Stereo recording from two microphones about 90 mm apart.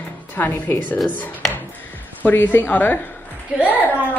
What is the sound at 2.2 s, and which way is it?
A woman's voice, 20° left (ahead or behind).